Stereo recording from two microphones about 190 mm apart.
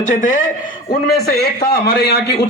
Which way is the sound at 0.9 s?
55° left (ahead or behind).